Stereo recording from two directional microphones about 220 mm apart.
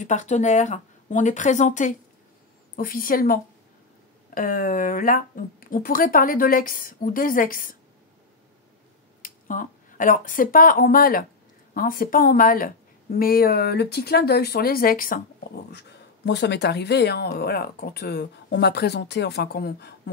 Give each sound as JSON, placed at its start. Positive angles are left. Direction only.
{"t": 0.0, "sound": "a woman's voice", "side_deg": 35}
{"t": 9.2, "sound": "a woman's voice", "side_deg": 40}
{"t": 15.7, "sound": "speech", "side_deg": 50}